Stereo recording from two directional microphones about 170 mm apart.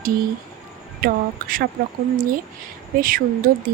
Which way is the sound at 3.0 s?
55° right (ahead or behind).